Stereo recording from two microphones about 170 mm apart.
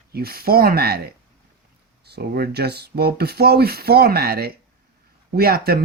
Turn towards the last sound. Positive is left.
turn(degrees=-65)  # may be behind; listen again after turning